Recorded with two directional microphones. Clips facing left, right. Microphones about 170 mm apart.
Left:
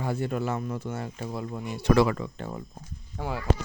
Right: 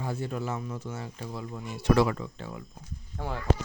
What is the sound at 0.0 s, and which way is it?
Speech, 65° left (ahead or behind).